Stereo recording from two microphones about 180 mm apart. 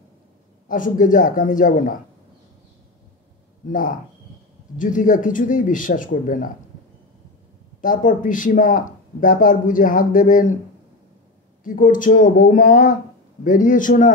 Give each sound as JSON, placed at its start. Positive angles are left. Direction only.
{"t": 0.7, "sound": "speech", "side_deg": 45}
{"t": 3.6, "sound": "speech", "side_deg": 50}
{"t": 7.8, "sound": "speech", "side_deg": 50}
{"t": 11.6, "sound": "speech", "side_deg": 50}